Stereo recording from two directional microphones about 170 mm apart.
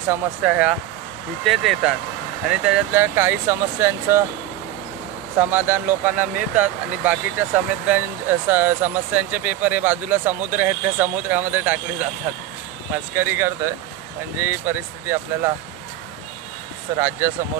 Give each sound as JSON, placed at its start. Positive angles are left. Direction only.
{"t": 0.1, "sound": "speech", "side_deg": -5}
{"t": 5.4, "sound": "speech", "side_deg": -10}
{"t": 16.9, "sound": "speech", "side_deg": -15}